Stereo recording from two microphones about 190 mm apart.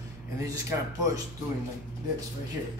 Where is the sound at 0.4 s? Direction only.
15° right (ahead or behind).